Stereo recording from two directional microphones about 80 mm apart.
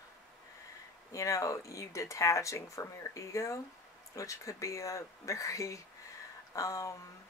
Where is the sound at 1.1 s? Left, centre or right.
Left.